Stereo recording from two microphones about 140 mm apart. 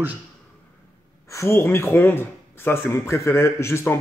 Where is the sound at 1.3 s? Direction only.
20° left (ahead or behind).